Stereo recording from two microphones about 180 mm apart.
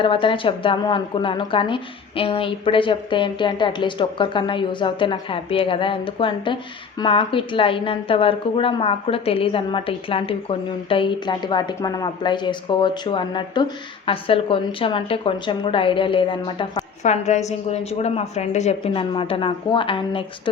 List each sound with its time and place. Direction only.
0.0 s a woman's voice: 30° left (ahead or behind)
17.0 s a woman's voice: 40° left (ahead or behind)